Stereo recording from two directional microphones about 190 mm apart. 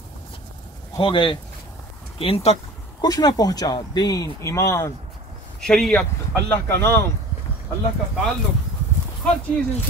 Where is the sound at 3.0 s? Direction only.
20° left (ahead or behind).